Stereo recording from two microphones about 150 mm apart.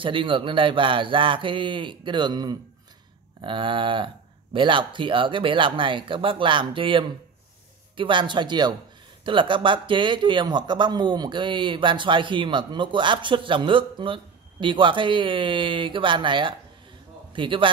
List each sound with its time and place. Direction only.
0.0 s a man's voice: 35° right (ahead or behind)